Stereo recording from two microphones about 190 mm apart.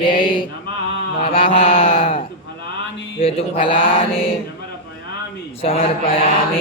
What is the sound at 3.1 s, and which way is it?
Mantra, 30° left (ahead or behind).